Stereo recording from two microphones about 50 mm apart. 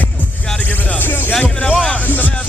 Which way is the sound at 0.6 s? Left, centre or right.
Left.